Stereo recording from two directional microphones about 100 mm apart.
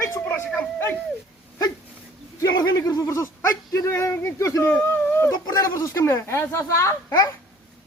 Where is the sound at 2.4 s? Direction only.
35° left (ahead or behind); by 5.2 s 20° left (ahead or behind).